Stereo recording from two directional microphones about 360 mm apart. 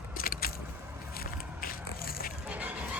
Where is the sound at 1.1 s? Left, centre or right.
Left.